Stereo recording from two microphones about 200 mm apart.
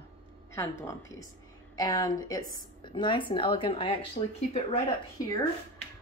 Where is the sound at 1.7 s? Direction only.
20° left (ahead or behind).